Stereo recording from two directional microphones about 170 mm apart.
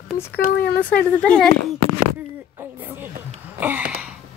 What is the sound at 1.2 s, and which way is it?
Speech, 5° left (ahead or behind).